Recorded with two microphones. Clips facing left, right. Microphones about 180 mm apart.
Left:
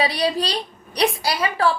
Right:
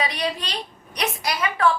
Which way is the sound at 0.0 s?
35° left (ahead or behind).